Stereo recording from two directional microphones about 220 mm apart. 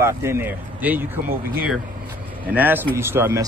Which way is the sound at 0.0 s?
10° right (ahead or behind).